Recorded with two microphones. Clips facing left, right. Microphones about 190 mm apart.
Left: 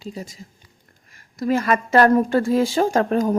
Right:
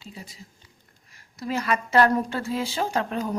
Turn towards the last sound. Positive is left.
turn(degrees=50)  # may be behind; listen again after turning